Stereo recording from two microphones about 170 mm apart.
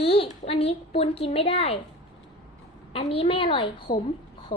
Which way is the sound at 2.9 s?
35° left (ahead or behind).